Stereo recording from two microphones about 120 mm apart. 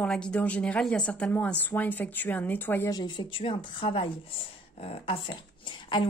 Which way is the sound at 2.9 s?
35° left (ahead or behind).